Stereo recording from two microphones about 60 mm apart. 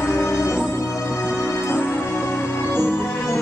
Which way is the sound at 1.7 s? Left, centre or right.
Left.